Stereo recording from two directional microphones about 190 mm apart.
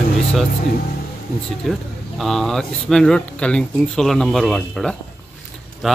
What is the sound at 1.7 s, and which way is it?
Speech, centre (ahead or behind).